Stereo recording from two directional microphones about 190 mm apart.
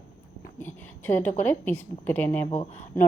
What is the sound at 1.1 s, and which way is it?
Speech, 10° left (ahead or behind).